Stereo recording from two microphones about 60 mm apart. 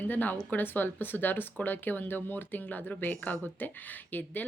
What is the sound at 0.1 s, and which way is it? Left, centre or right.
Speech, left.